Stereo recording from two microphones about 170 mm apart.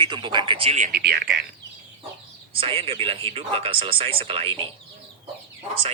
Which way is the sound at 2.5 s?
35° right (ahead or behind).